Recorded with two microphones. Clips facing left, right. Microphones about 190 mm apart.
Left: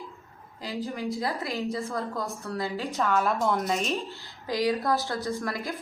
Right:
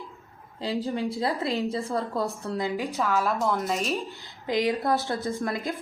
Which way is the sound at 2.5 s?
15° right (ahead or behind).